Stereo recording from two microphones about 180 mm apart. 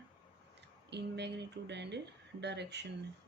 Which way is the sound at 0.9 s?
70° right (ahead or behind).